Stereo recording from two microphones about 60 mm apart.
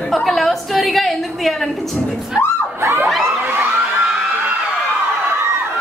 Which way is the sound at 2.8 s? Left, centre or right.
Right.